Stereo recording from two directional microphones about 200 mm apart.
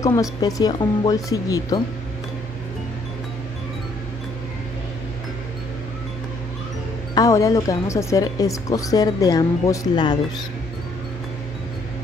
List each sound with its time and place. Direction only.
0.0 s speech: 20° left (ahead or behind)
7.2 s speech: 15° left (ahead or behind)